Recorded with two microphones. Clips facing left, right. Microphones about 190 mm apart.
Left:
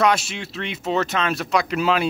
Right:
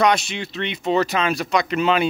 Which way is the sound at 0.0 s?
5° left (ahead or behind).